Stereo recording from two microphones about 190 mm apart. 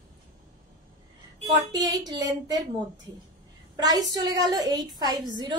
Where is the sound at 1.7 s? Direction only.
20° right (ahead or behind).